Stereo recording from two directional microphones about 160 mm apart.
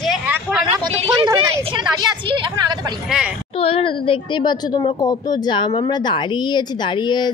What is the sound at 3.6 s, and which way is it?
Speech, 35° left (ahead or behind).